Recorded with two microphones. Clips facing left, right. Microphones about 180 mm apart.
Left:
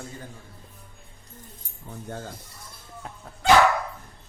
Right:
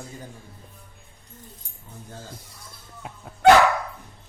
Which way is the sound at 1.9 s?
65° left (ahead or behind).